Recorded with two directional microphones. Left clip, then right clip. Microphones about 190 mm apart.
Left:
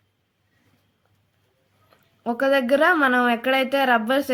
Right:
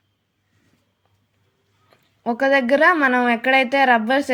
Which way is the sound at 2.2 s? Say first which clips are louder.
Right 3 dB; 10° right (ahead or behind).